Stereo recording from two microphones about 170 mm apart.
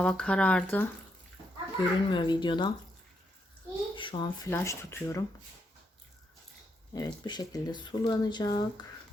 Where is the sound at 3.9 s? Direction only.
30° left (ahead or behind).